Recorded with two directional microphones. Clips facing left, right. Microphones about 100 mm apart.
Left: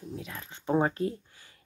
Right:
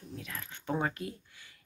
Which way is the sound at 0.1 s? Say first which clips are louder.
Left 1 dB; 25° left (ahead or behind).